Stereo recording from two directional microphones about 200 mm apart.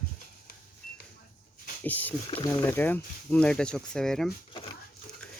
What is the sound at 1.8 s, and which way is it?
Speech, 10° left (ahead or behind).